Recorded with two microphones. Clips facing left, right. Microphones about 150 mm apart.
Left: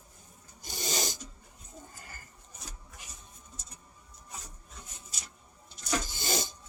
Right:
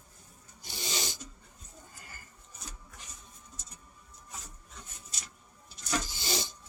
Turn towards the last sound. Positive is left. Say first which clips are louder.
# left 2 dB
turn(degrees=50)  # may be behind; listen again after turning